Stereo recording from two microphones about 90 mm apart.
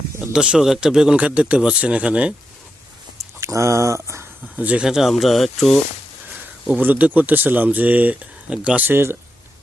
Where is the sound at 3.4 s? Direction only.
35° right (ahead or behind).